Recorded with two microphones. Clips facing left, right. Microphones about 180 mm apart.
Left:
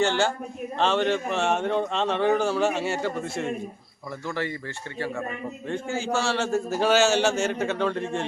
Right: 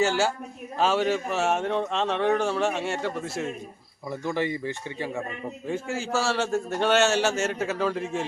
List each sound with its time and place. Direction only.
0.0 s speech: 5° right (ahead or behind)
4.3 s speech: 15° right (ahead or behind)
5.6 s speech: 5° right (ahead or behind)